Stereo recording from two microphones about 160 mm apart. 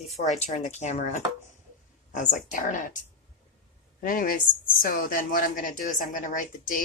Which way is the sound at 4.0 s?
60° left (ahead or behind).